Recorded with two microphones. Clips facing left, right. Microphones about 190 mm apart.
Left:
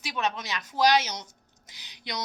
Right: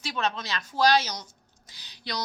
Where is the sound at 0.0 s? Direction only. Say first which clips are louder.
Right 1 dB; 15° left (ahead or behind).